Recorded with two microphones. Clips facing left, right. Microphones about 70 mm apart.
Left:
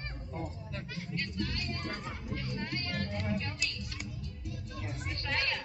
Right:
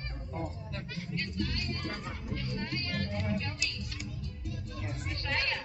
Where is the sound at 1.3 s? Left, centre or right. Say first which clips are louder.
Right 1 dB; centre.